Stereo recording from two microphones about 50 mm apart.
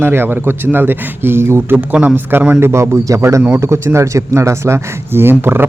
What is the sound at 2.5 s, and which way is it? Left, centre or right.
A man's voice, right.